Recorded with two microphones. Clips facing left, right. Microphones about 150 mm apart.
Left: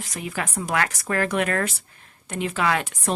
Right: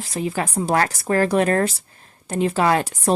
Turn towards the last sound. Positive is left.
turn(degrees=-35)  # may be behind; listen again after turning